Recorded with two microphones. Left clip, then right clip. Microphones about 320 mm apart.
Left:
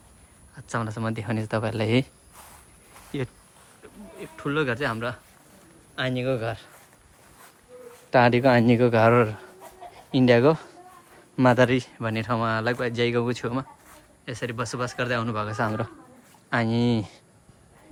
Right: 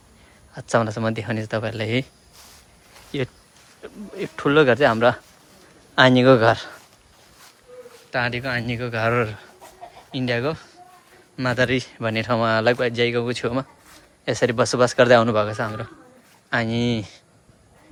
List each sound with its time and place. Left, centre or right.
0.5 s speech: centre
3.1 s speech: centre
3.8 s speech: centre
8.1 s speech: centre
14.3 s speech: centre